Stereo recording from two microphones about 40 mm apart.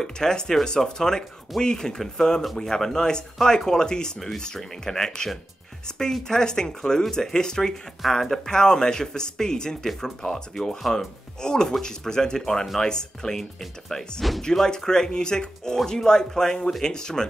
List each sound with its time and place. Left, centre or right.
0.0 s speech: centre
8.0 s speech: centre
8.5 s speech: centre